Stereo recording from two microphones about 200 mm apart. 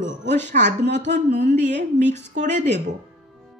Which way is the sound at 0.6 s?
40° right (ahead or behind).